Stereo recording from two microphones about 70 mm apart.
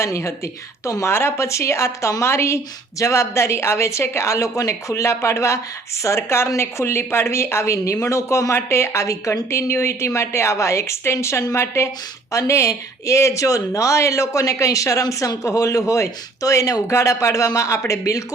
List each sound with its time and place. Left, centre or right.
0.0 s speech: left